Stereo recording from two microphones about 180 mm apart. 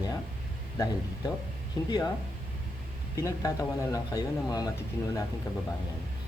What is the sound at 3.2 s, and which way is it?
Speech, 20° left (ahead or behind).